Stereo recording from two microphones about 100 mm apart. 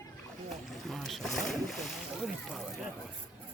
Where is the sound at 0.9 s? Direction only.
Centre (ahead or behind).